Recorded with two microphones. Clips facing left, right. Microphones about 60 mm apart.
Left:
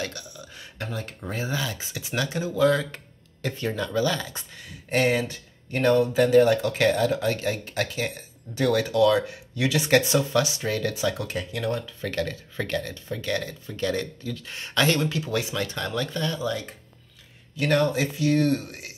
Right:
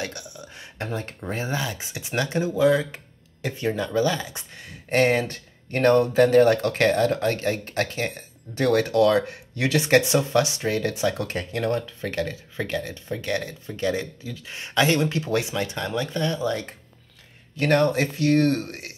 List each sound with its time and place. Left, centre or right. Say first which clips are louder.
0.0 s a sound: right 1 dB; right
1.3 s speech: right 1 dB; right
12.9 s speech: right 1 dB; right
15.5 s speech: right 2 dB; right